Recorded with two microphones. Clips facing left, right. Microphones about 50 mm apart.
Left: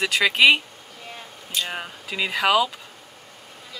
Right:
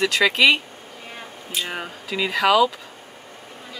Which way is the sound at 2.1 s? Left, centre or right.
Centre.